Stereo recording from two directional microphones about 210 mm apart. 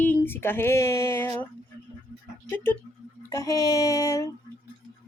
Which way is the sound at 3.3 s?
15° left (ahead or behind).